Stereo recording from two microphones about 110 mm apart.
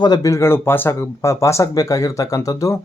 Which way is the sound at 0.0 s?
35° left (ahead or behind).